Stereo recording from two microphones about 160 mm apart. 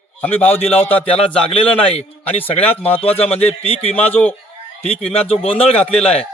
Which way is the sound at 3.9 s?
10° left (ahead or behind).